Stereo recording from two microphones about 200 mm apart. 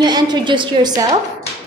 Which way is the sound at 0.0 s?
20° right (ahead or behind).